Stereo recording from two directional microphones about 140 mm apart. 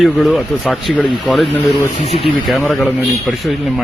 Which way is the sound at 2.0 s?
45° left (ahead or behind).